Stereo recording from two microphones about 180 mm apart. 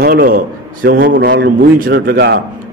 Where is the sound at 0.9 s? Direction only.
65° right (ahead or behind).